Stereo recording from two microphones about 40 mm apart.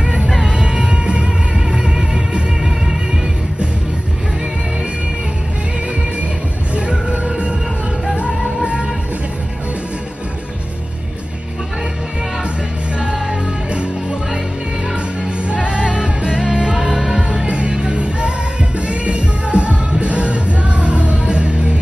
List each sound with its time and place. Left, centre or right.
0.0 s music: right
0.9 s music: right
6.7 s music: right
15.4 s music: right
16.7 s music: centre
17.5 s music: right